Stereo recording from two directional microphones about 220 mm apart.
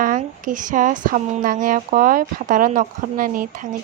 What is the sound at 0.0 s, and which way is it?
Speech, 35° right (ahead or behind).